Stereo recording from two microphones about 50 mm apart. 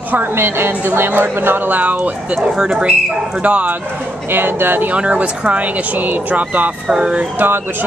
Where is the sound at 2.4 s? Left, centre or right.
Centre.